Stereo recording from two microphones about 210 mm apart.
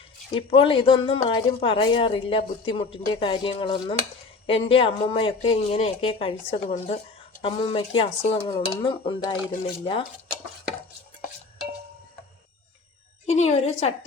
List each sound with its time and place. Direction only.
0.3 s speech: 25° left (ahead or behind)
13.2 s a woman's voice: 30° left (ahead or behind)